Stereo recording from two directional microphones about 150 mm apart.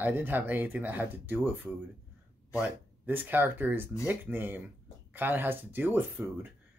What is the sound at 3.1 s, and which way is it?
Speech, 15° right (ahead or behind).